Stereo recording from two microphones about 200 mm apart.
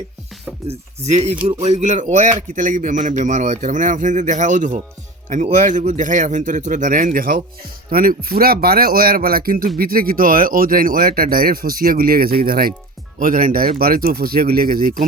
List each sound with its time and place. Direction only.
0.7 s speech: 30° right (ahead or behind)